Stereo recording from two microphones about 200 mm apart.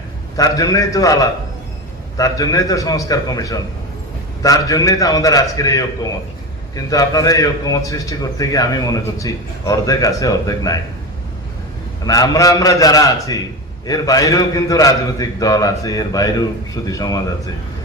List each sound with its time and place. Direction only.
0.3 s a man's voice: 15° left (ahead or behind)
12.0 s a man's voice: 15° left (ahead or behind)